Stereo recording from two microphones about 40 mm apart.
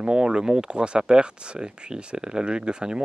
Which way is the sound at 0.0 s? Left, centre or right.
Centre.